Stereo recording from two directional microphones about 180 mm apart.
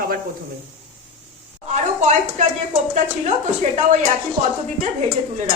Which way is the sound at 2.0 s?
40° right (ahead or behind).